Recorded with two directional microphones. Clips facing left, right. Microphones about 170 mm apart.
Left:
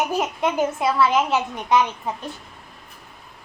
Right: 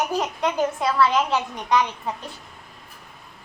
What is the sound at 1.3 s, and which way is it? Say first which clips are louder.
Speech: left 2 dB; 20° left (ahead or behind).